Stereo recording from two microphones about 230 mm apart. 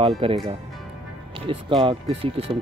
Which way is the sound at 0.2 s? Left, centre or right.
Right.